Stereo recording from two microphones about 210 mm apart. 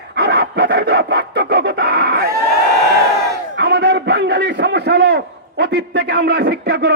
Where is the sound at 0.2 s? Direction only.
50° right (ahead or behind).